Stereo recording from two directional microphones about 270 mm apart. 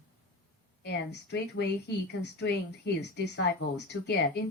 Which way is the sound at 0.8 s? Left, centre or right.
Left.